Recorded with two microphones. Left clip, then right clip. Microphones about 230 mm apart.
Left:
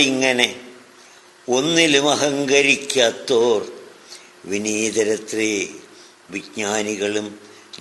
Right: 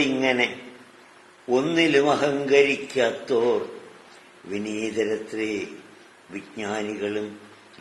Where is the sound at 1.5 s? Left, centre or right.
Left.